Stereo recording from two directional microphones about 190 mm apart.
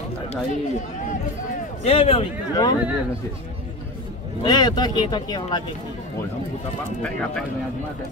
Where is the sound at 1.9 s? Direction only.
30° left (ahead or behind).